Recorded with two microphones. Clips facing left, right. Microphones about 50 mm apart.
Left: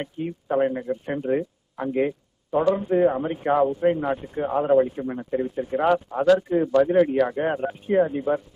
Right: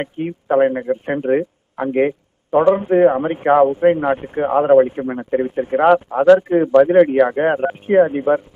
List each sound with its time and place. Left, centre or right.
0.0 s speech: right
1.9 s a sound: right
2.7 s speech: right